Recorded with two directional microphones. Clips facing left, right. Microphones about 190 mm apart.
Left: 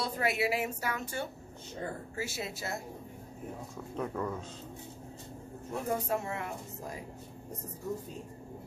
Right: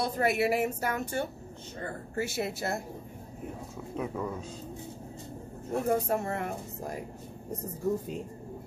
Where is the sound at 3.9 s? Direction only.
10° right (ahead or behind).